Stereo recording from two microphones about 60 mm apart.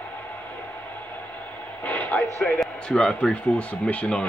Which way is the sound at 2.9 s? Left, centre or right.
Centre.